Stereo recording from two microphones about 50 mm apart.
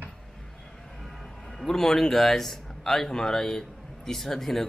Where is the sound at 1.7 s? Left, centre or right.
Centre.